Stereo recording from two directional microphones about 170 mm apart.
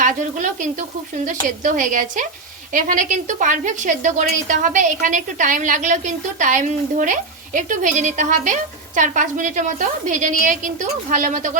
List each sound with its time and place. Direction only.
0.0 s a woman's voice: 45° right (ahead or behind)